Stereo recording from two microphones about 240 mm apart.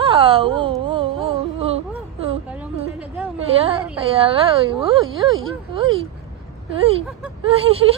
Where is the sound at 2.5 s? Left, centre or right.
Centre.